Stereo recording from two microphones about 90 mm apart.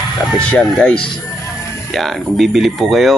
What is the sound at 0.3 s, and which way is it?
Speech, 10° left (ahead or behind).